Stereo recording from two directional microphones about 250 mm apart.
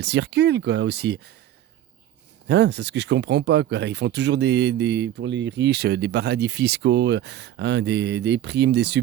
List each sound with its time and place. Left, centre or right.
0.0 s speech: right
2.5 s speech: right